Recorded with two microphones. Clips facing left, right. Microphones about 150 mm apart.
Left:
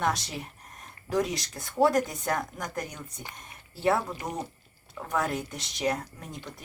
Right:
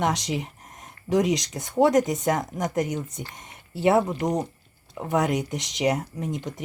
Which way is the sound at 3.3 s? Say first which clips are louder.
Right 3 dB; 20° right (ahead or behind).